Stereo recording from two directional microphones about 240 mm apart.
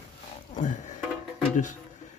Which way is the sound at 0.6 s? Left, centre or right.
Left.